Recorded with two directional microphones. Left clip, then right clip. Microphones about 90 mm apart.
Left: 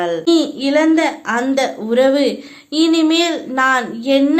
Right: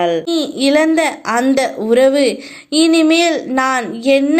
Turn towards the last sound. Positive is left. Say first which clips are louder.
# right 1 dB
turn(degrees=-40)  # may be behind; listen again after turning